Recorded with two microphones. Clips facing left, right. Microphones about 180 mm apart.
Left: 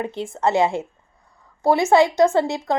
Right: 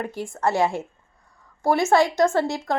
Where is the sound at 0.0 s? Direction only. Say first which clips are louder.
Left 3 dB; 20° left (ahead or behind).